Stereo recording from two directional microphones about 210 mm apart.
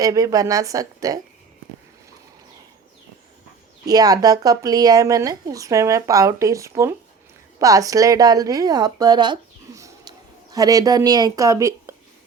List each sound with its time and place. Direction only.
0.0 s speech: 15° right (ahead or behind)
3.8 s a woman's voice: 20° right (ahead or behind)